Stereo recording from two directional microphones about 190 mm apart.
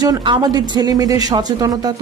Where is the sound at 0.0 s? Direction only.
25° right (ahead or behind).